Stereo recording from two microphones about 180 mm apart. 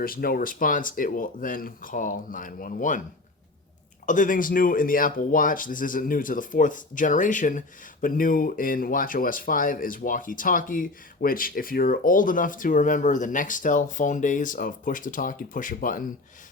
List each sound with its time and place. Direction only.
0.0 s speech: 55° left (ahead or behind)
4.0 s speech: 45° left (ahead or behind)